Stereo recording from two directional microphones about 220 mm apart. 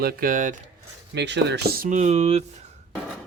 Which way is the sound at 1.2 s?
50° right (ahead or behind).